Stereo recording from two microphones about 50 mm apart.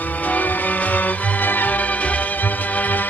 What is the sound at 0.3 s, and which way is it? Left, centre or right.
Music, left.